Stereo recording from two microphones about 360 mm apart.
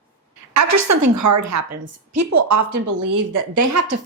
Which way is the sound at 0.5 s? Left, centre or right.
Right.